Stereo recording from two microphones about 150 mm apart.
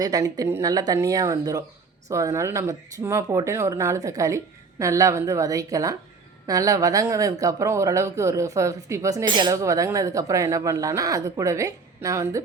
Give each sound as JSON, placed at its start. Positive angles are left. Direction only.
{"t": 0.0, "sound": "speech", "side_deg": -25}